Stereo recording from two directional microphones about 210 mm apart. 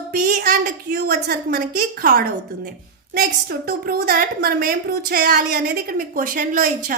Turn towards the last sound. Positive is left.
turn(degrees=-40)  # may be behind; listen again after turning